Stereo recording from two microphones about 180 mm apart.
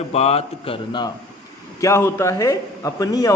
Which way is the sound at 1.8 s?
15° left (ahead or behind).